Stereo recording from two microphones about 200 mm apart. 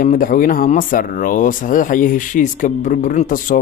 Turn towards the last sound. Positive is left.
turn(degrees=40)  # may be behind; listen again after turning